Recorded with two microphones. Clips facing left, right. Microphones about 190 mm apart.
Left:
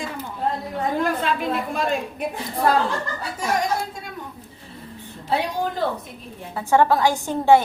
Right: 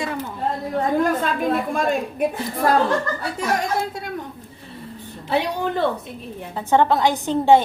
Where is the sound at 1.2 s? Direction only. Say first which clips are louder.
Right 2 dB; 45° right (ahead or behind).